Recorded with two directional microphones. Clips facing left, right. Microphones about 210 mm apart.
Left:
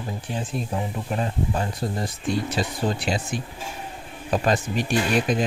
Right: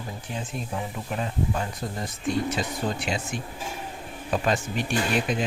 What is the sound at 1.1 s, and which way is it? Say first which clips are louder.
Speech: left 2 dB; 35° left (ahead or behind).